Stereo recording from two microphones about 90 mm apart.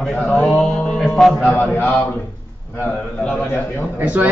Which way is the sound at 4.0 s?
20° right (ahead or behind).